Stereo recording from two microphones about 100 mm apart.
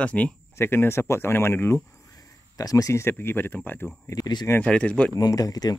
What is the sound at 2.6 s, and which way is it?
Speech, 35° left (ahead or behind).